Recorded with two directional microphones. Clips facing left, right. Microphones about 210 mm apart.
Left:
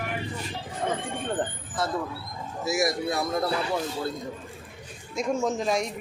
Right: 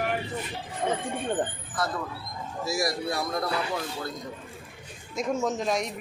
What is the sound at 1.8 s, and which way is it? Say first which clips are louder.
Speech: left 2 dB; 25° left (ahead or behind).